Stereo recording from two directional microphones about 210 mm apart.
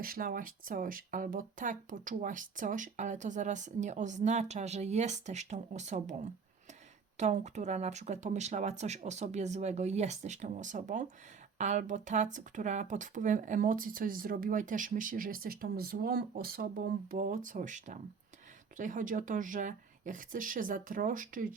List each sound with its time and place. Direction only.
0.0 s speech: 45° right (ahead or behind)
7.2 s speech: 35° right (ahead or behind)